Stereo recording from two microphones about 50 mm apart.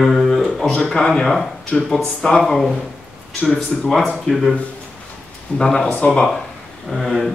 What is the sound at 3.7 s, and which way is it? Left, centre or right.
Speech, centre.